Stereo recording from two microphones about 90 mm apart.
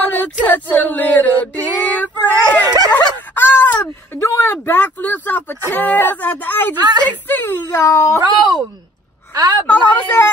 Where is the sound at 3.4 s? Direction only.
20° left (ahead or behind).